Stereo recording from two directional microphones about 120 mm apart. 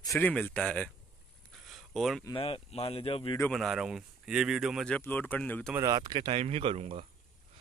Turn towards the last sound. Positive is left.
turn(degrees=-55)  # may be behind; listen again after turning